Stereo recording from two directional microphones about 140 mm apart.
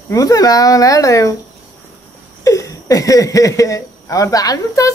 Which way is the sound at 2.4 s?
25° left (ahead or behind).